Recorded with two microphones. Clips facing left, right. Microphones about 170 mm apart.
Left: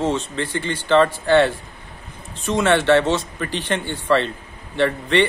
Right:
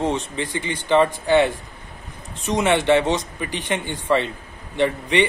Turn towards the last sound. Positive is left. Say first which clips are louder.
# left 1 dB
turn(degrees=-15)  # may be behind; listen again after turning